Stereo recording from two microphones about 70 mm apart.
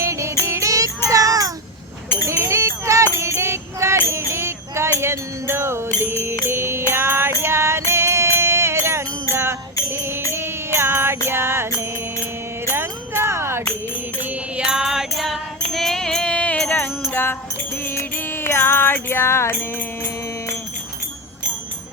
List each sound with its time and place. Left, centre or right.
0.0 s music: right
0.7 s child singing: right
2.2 s music: right
4.1 s a sound: right
6.5 s music: right
12.7 s jingle bell: right
14.6 s music: centre
17.0 s music: left
18.4 s music: left